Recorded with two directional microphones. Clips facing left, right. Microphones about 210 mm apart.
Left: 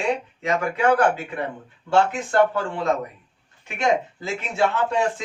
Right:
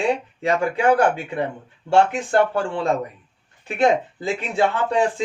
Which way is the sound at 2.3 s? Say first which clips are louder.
Right 1 dB; 30° right (ahead or behind).